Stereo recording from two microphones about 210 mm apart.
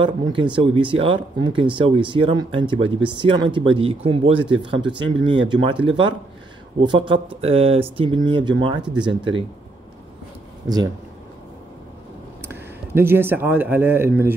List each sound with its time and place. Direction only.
0.0 s speech: 25° right (ahead or behind)
10.6 s speech: 10° right (ahead or behind)
12.4 s speech: 10° right (ahead or behind)